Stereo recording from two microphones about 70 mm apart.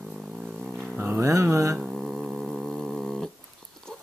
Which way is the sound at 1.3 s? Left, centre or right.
Right.